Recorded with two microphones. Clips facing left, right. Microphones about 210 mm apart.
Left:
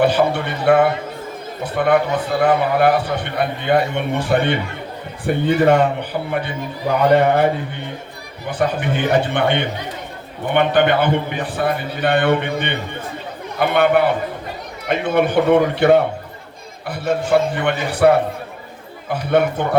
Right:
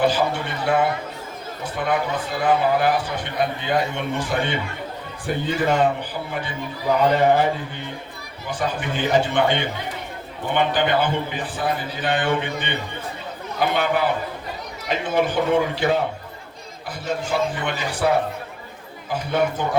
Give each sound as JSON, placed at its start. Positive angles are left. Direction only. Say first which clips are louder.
{"t": 0.0, "sound": "a man's voice", "louder": "left 5 dB", "side_deg": 60}
{"t": 8.4, "sound": "a man's voice", "louder": "left 6 dB", "side_deg": 60}